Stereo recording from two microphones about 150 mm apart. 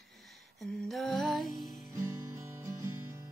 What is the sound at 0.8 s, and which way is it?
Music, centre (ahead or behind).